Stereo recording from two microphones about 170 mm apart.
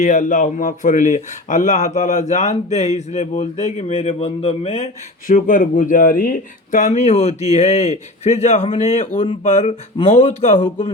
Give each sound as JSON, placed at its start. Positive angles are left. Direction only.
{"t": 0.0, "sound": "speech", "side_deg": 50}
{"t": 5.3, "sound": "speech", "side_deg": 55}